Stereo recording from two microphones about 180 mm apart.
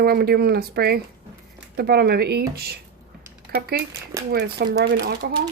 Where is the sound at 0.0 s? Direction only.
60° right (ahead or behind).